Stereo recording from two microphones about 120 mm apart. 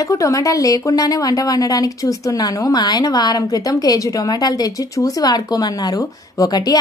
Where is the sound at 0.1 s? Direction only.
25° left (ahead or behind).